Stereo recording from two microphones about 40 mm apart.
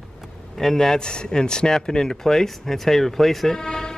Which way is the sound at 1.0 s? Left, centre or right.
Left.